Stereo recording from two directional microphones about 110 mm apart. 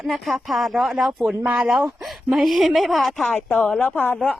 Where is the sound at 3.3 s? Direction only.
15° left (ahead or behind).